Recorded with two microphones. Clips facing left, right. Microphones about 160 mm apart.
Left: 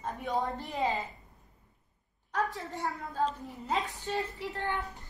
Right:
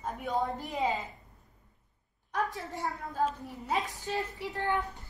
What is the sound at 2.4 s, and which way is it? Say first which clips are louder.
A woman's voice: even; 20° right (ahead or behind).